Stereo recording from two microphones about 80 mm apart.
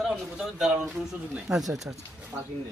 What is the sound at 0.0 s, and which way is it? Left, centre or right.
A man's voice, centre.